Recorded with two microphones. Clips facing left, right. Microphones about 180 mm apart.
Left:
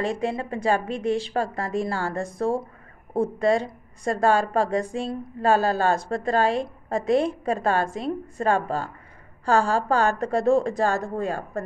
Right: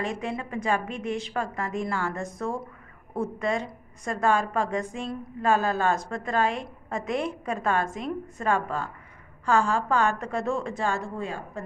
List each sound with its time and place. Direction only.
0.0 s a woman's voice: 30° left (ahead or behind)